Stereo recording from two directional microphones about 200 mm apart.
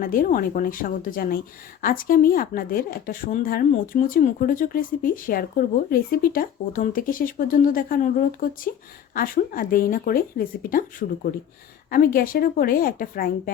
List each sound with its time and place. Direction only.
0.0 s speech: 45° left (ahead or behind)